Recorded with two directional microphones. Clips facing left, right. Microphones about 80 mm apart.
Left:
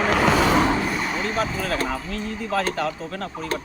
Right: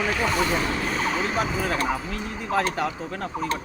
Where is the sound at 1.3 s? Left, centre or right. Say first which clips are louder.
Left 1 dB; centre.